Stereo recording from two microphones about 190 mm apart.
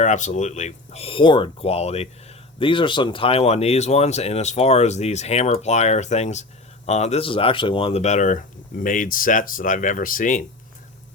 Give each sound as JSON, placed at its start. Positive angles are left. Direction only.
{"t": 0.0, "sound": "speech", "side_deg": 40}